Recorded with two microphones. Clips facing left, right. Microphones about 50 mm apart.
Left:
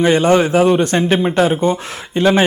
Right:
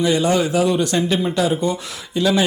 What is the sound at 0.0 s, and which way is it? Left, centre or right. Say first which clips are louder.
Speech: left 5 dB; left.